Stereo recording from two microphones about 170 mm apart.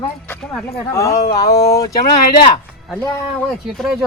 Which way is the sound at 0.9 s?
20° left (ahead or behind).